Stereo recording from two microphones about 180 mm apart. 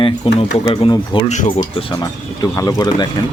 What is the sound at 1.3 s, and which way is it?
Speech, 40° left (ahead or behind).